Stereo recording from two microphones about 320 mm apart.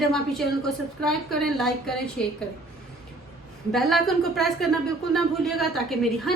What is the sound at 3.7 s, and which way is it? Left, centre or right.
A woman's voice, centre.